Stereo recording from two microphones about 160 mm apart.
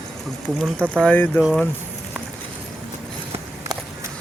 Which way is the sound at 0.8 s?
10° right (ahead or behind).